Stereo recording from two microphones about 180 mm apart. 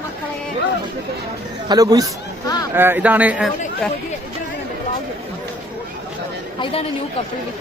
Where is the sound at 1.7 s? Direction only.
20° right (ahead or behind).